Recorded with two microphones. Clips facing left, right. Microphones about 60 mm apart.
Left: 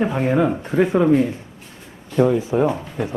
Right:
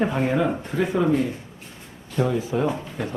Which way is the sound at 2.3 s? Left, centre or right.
Left.